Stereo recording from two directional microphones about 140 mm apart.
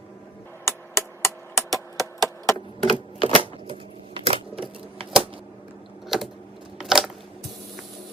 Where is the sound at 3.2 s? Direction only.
45° right (ahead or behind).